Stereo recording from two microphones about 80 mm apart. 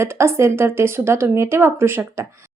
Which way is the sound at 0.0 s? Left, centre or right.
Right.